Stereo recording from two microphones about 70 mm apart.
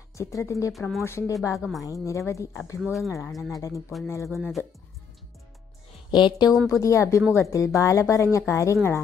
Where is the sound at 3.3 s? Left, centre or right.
Centre.